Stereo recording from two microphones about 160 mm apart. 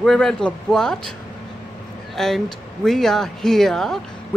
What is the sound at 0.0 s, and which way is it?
Speech, 5° left (ahead or behind).